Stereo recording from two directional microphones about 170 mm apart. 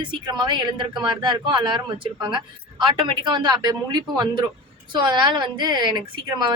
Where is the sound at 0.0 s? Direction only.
25° right (ahead or behind).